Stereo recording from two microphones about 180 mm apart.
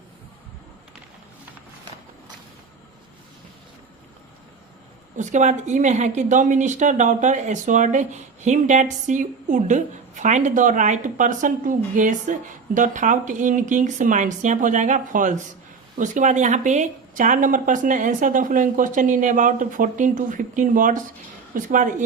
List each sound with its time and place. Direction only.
5.1 s a woman's voice: 40° right (ahead or behind)